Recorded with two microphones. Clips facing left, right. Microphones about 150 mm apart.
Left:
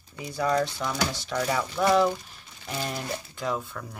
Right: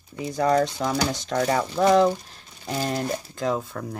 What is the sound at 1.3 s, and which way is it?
Speech, 55° right (ahead or behind).